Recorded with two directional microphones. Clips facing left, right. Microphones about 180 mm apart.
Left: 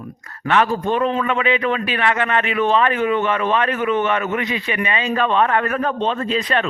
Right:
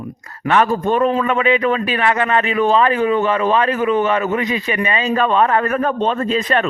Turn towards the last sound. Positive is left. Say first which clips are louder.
# right 3 dB
turn(degrees=-45)  # may be behind; listen again after turning